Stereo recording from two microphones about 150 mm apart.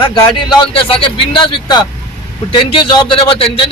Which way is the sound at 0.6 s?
35° left (ahead or behind).